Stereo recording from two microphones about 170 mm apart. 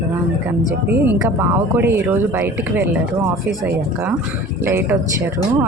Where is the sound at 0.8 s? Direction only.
10° right (ahead or behind).